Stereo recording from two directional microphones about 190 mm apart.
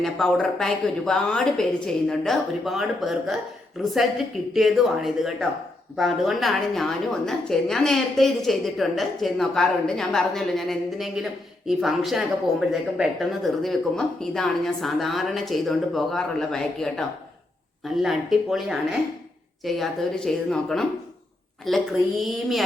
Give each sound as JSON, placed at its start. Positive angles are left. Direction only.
{"t": 0.0, "sound": "a woman's voice", "side_deg": 0}
{"t": 4.5, "sound": "a woman's voice", "side_deg": 0}